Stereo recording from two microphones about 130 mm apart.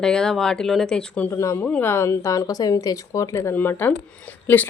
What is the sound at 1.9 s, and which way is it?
Speech, 20° left (ahead or behind).